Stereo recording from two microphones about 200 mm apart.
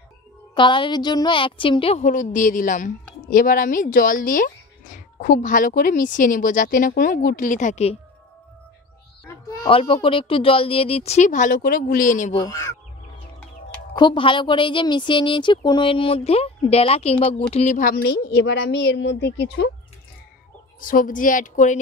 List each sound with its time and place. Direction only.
0.6 s a woman's voice: 25° left (ahead or behind)
9.3 s a sound: 15° left (ahead or behind)
9.7 s a woman's voice: 25° left (ahead or behind)
12.4 s speech: 15° left (ahead or behind)
13.9 s a woman's voice: 25° left (ahead or behind); by 19.7 s 55° left (ahead or behind)
20.8 s speech: 40° left (ahead or behind)